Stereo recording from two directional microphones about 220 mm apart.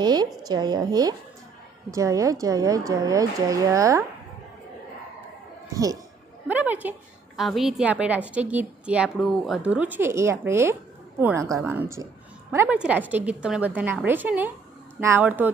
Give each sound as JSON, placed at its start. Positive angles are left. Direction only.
{"t": 0.0, "sound": "a woman's voice", "side_deg": -20}
{"t": 5.7, "sound": "a woman's voice", "side_deg": -15}